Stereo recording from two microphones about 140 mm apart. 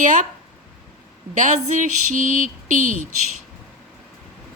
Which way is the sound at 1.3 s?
60° right (ahead or behind).